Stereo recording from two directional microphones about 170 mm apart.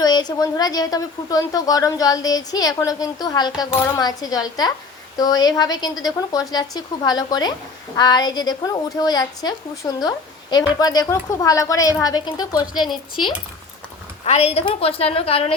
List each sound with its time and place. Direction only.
0.0 s a woman's voice: 25° left (ahead or behind)
14.3 s a woman's voice: 40° left (ahead or behind)